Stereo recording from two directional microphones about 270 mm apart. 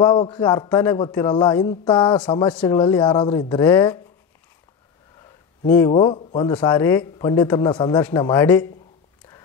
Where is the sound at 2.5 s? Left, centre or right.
Centre.